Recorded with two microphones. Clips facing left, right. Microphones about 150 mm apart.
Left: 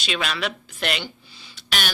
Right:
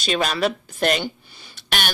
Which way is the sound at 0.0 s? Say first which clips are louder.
Right 6 dB; 40° right (ahead or behind).